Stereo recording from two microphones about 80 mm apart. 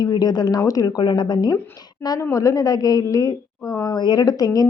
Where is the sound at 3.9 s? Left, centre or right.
Left.